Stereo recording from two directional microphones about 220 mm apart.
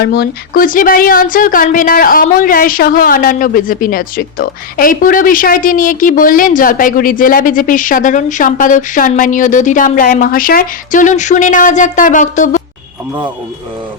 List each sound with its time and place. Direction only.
0.0 s speech: 45° left (ahead or behind)